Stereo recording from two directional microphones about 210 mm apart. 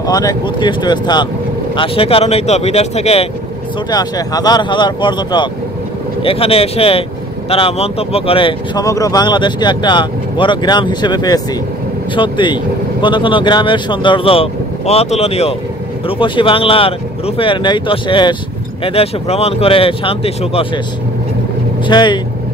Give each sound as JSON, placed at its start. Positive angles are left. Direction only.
{"t": 0.0, "sound": "speech", "side_deg": 15}
{"t": 3.9, "sound": "speech", "side_deg": 20}
{"t": 21.8, "sound": "speech", "side_deg": 20}